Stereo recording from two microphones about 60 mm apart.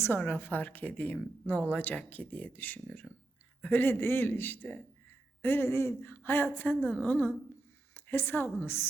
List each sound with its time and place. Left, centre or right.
0.2 s a woman's voice: left
7.9 s a woman's voice: left